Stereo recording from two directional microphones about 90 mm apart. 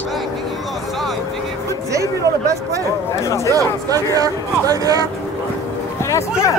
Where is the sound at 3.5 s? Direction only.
40° right (ahead or behind).